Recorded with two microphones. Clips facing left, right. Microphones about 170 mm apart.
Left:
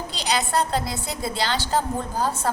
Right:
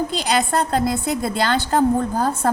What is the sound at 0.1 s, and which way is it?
A woman's voice, 50° right (ahead or behind).